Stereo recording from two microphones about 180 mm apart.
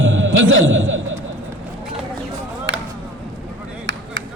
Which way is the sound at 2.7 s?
75° right (ahead or behind).